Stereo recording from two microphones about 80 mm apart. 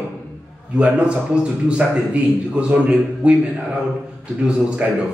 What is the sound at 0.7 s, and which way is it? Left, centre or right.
A man's voice, centre.